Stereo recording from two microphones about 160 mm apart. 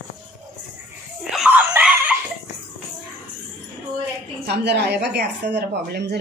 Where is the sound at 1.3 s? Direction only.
5° right (ahead or behind).